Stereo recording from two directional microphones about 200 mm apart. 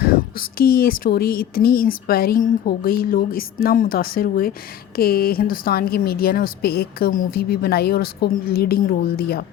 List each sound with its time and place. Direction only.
0.0 s speech: 45° left (ahead or behind)